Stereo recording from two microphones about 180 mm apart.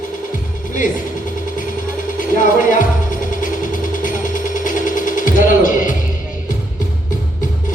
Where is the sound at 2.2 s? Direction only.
45° left (ahead or behind).